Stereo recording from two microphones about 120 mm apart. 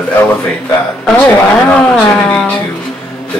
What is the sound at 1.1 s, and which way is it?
Speech, 10° left (ahead or behind).